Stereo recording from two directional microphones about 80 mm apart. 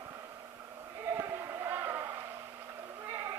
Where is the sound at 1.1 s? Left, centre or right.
Right.